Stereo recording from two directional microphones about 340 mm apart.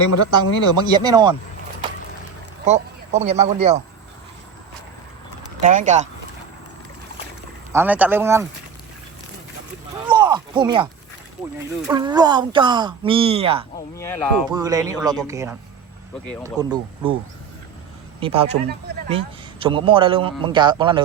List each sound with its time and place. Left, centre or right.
0.3 s speech: centre
2.6 s speech: centre
5.5 s speech: right
7.7 s speech: centre
10.1 s a sound: centre
11.9 s speech: centre
13.7 s speech: centre
14.5 s speech: centre
18.2 s speech: centre